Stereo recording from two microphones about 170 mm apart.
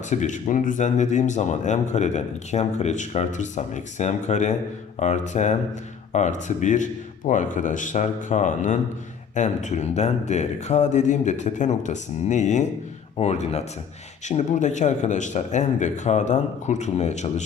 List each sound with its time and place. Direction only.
0.1 s speech: 45° left (ahead or behind)